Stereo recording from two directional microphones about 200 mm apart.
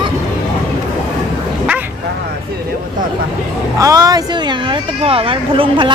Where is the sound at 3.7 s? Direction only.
15° right (ahead or behind).